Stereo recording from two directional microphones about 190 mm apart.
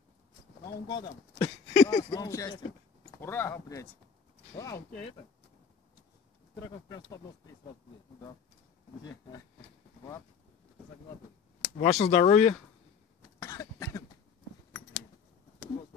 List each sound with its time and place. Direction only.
0.7 s speech: 20° left (ahead or behind)
6.9 s speech: 15° left (ahead or behind)
11.8 s speech: 35° left (ahead or behind)
13.4 s cough: 15° left (ahead or behind)